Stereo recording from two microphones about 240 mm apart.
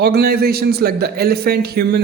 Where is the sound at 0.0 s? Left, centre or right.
Right.